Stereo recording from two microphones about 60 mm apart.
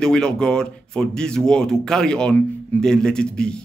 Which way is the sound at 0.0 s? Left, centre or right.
Centre.